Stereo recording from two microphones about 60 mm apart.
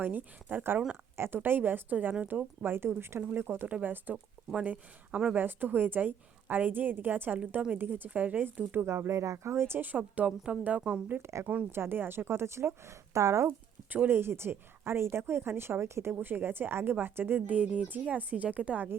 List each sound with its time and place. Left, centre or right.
0.0 s a woman's voice: right
2.6 s a woman's voice: right
3.7 s a woman's voice: right
10.0 s a woman's voice: centre
11.2 s speech: right
11.7 s a woman's voice: right
13.9 s a woman's voice: right
16.2 s a woman's voice: right